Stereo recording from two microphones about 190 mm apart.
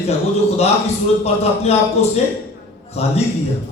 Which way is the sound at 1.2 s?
35° left (ahead or behind).